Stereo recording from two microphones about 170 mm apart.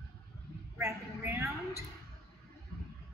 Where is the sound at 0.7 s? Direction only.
15° right (ahead or behind).